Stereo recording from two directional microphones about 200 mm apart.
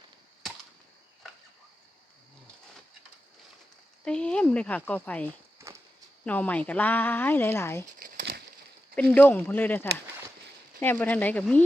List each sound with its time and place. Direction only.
1.2 s cricket: centre (ahead or behind)
4.0 s speech: 5° left (ahead or behind)
8.1 s a sound: 60° right (ahead or behind)
9.0 s speech: 5° left (ahead or behind)